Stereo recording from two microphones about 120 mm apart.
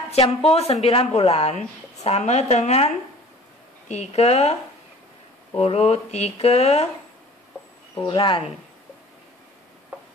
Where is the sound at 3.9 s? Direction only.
60° left (ahead or behind).